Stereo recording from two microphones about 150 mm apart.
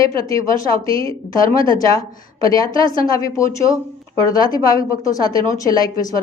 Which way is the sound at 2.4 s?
25° left (ahead or behind).